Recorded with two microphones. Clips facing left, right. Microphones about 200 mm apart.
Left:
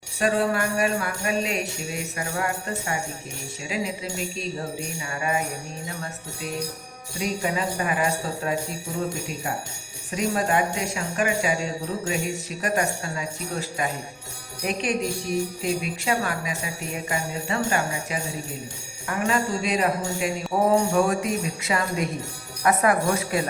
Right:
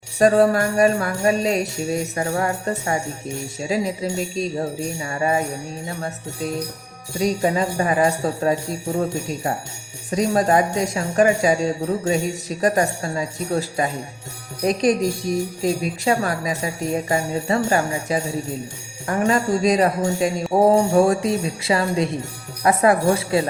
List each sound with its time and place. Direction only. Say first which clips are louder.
0.2 s speech: right 8 dB; 40° right (ahead or behind)
7.2 s speech: right 7 dB; 35° right (ahead or behind)
10.1 s speech: right 6 dB; 35° right (ahead or behind)